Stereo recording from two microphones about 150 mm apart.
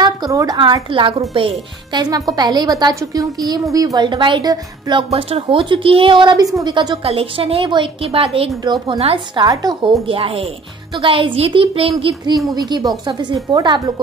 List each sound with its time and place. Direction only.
0.0 s a sound: 25° right (ahead or behind)
0.6 s a woman's voice: 30° right (ahead or behind)
7.0 s a woman's voice: 40° right (ahead or behind)
12.5 s a woman's voice: 25° right (ahead or behind)